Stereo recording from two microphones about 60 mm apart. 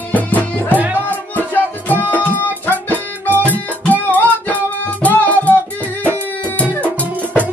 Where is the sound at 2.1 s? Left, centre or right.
Left.